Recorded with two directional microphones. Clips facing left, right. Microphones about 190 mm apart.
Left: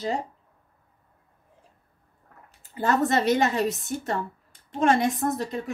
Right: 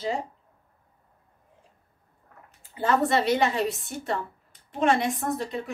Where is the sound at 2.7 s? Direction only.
45° left (ahead or behind).